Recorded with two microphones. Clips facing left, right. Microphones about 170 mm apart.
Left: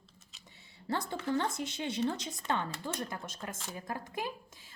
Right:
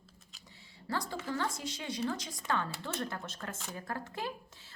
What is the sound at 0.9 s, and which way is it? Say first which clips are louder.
A woman's voice: left 3 dB; 20° left (ahead or behind).